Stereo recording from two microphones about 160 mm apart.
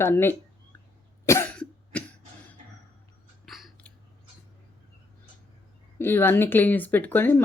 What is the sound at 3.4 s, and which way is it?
Chewing, centre (ahead or behind).